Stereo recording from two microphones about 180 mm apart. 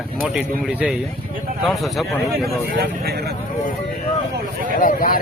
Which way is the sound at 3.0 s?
60° right (ahead or behind).